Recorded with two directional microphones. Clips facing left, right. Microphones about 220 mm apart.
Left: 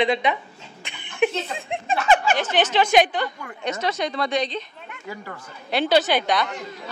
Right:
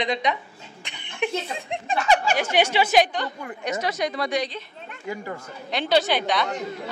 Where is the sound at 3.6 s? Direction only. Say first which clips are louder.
Left 1 dB; 25° left (ahead or behind).